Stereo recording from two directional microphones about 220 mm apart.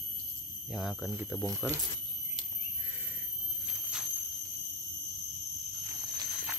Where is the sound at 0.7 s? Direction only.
Centre (ahead or behind).